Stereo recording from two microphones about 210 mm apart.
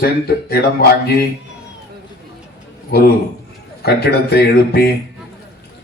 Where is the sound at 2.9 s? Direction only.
50° left (ahead or behind).